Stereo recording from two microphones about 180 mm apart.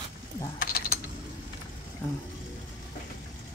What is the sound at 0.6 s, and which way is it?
Mechanisms, 60° left (ahead or behind).